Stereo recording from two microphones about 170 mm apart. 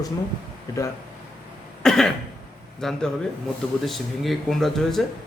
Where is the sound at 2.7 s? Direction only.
Centre (ahead or behind).